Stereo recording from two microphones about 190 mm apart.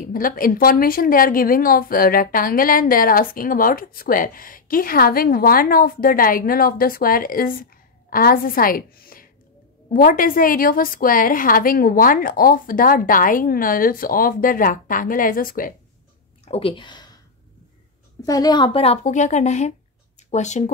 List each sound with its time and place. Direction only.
0.1 s a woman's voice: 50° left (ahead or behind)
16.4 s speech: 30° left (ahead or behind)
18.2 s speech: 20° left (ahead or behind); by 20.7 s 40° left (ahead or behind)